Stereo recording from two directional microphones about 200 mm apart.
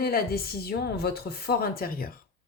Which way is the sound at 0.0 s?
50° left (ahead or behind).